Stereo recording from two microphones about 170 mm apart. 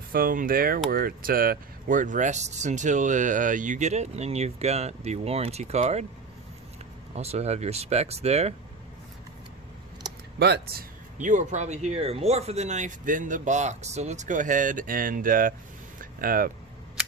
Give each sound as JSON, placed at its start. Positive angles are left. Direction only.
{"t": 0.1, "sound": "speech", "side_deg": -55}
{"t": 7.2, "sound": "speech", "side_deg": -40}
{"t": 10.0, "sound": "a sound", "side_deg": -25}
{"t": 10.4, "sound": "speech", "side_deg": -70}
{"t": 11.2, "sound": "speech", "side_deg": -45}
{"t": 16.0, "sound": "a sound", "side_deg": -55}